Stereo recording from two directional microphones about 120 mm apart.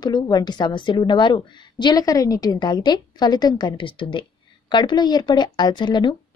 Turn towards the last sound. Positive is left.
turn(degrees=40)  # may be behind; listen again after turning